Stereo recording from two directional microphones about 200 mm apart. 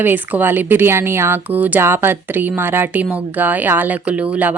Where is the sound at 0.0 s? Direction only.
10° right (ahead or behind).